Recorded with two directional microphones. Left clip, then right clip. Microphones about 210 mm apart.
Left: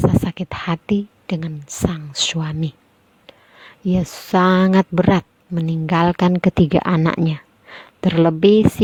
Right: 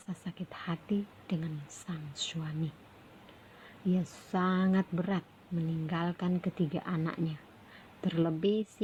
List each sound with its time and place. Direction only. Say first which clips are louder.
0.3 s a woman's voice: left 16 dB; 50° left (ahead or behind)
3.9 s a woman's voice: left 18 dB; 50° left (ahead or behind)